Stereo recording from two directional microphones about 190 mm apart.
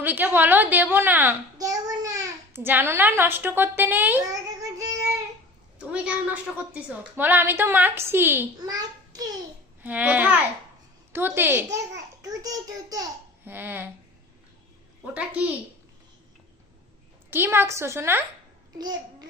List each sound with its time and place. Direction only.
0.0 s a child's voice: 10° right (ahead or behind)
4.8 s child singing: 20° right (ahead or behind)
5.8 s a child's voice: 5° right (ahead or behind)
9.8 s a child's voice: 10° right (ahead or behind)
15.0 s a child's voice: 5° right (ahead or behind)
17.3 s a child's voice: 10° right (ahead or behind)